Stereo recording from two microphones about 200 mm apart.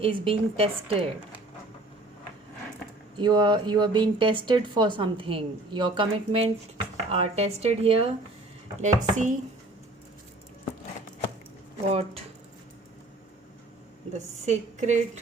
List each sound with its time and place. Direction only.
0.0 s speech: 25° right (ahead or behind)
3.2 s a woman's voice: 20° right (ahead or behind); by 9.4 s 40° right (ahead or behind)
11.9 s speech: 30° right (ahead or behind)
14.1 s a woman's voice: 35° right (ahead or behind)